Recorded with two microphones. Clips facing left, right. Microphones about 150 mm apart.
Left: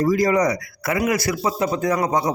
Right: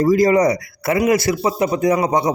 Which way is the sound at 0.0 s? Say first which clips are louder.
Right 4 dB; 25° right (ahead or behind).